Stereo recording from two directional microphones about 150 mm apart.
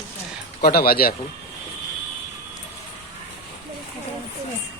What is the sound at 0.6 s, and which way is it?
Speech, 90° left.